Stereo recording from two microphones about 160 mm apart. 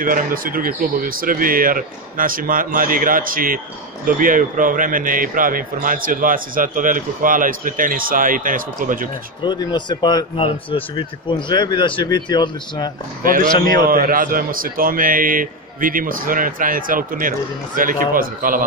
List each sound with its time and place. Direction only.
0.0 s a man's voice: 60° right (ahead or behind)
9.4 s speech: 25° left (ahead or behind)
13.2 s a man's voice: 60° right (ahead or behind)